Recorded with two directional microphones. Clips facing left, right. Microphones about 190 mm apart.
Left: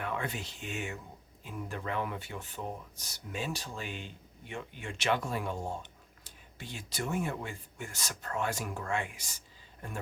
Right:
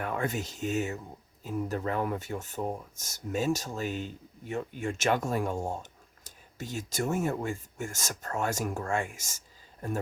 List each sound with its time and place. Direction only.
0.0 s speech: 45° right (ahead or behind)